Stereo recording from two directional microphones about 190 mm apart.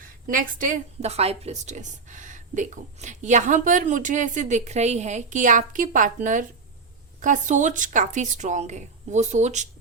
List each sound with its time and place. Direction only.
0.0 s a woman's voice: 45° right (ahead or behind)